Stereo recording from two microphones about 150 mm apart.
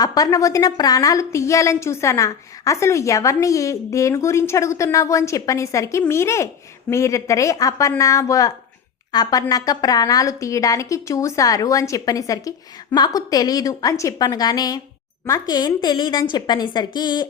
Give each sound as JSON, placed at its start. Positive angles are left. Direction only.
{"t": 0.0, "sound": "a woman's voice", "side_deg": 25}